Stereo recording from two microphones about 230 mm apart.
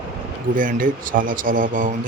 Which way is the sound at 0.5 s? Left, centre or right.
Right.